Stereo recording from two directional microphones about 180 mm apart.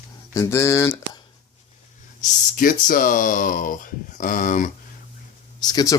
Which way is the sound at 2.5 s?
50° left (ahead or behind).